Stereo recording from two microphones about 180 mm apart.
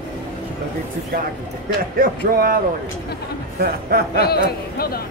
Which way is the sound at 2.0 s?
55° right (ahead or behind).